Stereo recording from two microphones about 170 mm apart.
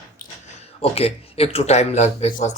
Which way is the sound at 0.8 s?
35° left (ahead or behind).